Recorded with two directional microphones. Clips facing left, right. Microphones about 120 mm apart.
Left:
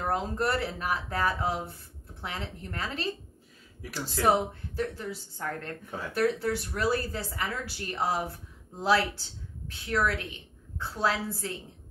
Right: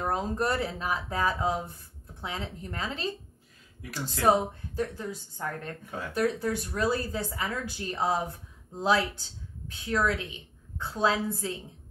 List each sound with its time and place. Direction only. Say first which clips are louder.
0.0 s speech: even; 20° right (ahead or behind)
4.2 s speech: right 1 dB; 20° right (ahead or behind)